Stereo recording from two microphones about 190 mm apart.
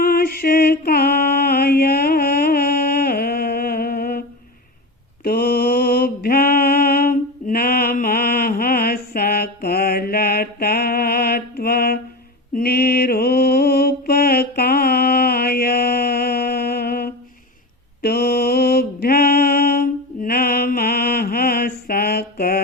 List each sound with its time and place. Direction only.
0.0 s mantra: 50° left (ahead or behind)
5.2 s mantra: 55° left (ahead or behind)